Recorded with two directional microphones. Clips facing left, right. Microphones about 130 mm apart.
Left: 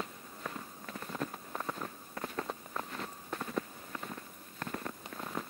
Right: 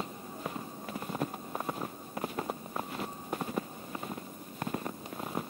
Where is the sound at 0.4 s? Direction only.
20° right (ahead or behind).